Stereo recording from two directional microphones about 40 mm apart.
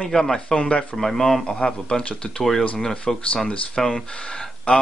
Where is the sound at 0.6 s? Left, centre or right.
Left.